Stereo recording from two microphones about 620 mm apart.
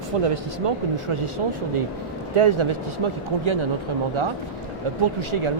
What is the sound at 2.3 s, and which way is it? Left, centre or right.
Speech, right.